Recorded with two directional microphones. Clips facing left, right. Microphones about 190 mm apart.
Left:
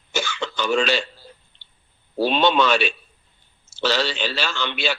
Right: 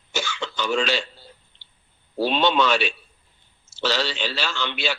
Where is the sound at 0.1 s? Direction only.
55° left (ahead or behind).